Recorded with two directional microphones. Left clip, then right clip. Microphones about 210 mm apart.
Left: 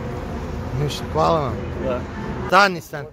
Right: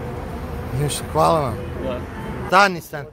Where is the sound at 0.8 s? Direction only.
20° right (ahead or behind).